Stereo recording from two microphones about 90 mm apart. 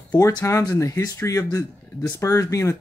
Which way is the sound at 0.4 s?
35° left (ahead or behind).